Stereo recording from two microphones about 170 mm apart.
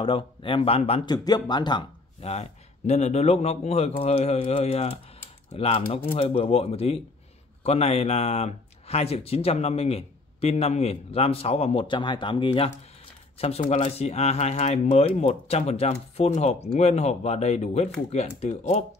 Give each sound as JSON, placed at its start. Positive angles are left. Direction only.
{"t": 0.0, "sound": "speech", "side_deg": 30}
{"t": 1.0, "sound": "speech", "side_deg": 25}
{"t": 2.2, "sound": "speech", "side_deg": 35}